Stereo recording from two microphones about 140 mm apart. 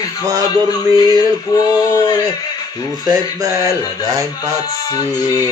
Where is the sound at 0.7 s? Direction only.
30° left (ahead or behind).